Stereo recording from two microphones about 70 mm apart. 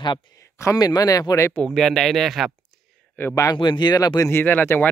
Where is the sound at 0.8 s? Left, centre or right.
Left.